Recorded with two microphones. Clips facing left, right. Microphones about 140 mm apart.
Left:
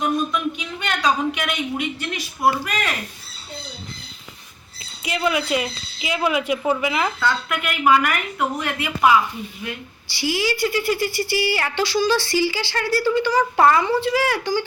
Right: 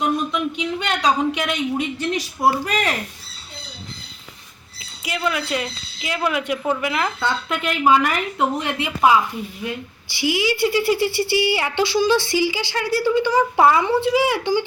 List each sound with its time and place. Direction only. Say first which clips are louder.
0.3 s a woman's voice: right 2 dB; 25° right (ahead or behind)
4.8 s a woman's voice: left 1 dB; centre (ahead or behind)
7.2 s a woman's voice: even; 25° right (ahead or behind)
10.2 s a woman's voice: right 2 dB; 20° right (ahead or behind)
13.6 s a woman's voice: even; 5° right (ahead or behind)
13.8 s a woman's voice: right 2 dB; 20° right (ahead or behind)